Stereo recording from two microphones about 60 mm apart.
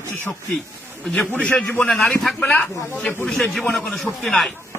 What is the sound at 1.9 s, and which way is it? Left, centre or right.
Speech, centre.